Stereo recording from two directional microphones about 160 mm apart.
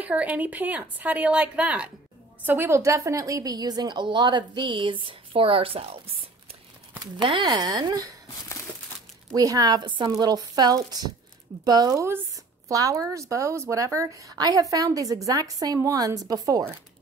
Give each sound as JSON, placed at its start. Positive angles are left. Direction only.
{"t": 0.0, "sound": "a woman's voice", "side_deg": -10}
{"t": 7.2, "sound": "a woman's voice", "side_deg": -30}
{"t": 9.3, "sound": "a woman's voice", "side_deg": -20}